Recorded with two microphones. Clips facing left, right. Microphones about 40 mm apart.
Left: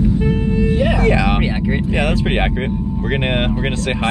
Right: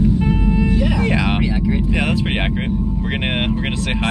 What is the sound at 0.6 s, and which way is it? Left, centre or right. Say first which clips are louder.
Music: left 2 dB; left.